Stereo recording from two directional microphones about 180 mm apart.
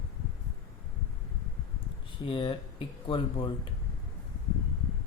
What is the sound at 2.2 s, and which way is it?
A man's voice, 30° left (ahead or behind).